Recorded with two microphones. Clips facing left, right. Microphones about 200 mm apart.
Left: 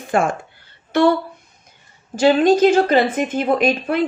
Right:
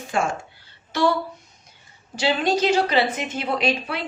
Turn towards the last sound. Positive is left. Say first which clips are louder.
# left 7 dB
turn(degrees=50)  # may be behind; listen again after turning